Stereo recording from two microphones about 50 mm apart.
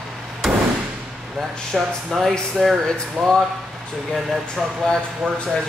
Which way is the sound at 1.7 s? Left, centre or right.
Centre.